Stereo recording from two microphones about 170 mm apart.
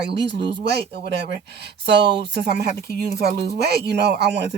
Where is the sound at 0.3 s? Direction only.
90° right.